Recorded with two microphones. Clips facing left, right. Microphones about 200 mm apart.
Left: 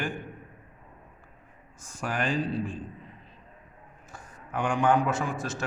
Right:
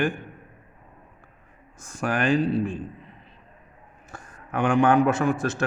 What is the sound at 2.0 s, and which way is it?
Speech, 70° right (ahead or behind).